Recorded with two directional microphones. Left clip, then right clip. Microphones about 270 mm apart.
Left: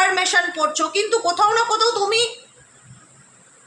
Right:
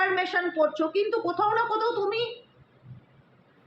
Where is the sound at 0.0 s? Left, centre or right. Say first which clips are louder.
Left 8 dB; left.